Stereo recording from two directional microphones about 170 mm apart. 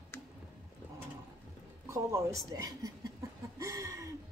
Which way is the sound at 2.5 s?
20° right (ahead or behind).